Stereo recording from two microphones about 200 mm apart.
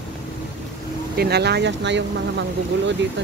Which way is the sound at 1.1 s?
55° right (ahead or behind).